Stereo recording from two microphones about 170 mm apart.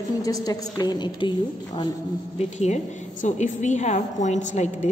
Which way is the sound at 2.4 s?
40° left (ahead or behind).